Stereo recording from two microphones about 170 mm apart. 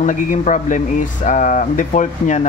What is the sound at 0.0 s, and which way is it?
Speech, 50° left (ahead or behind).